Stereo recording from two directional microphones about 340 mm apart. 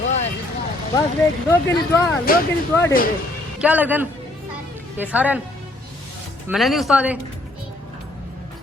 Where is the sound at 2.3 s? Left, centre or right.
Left.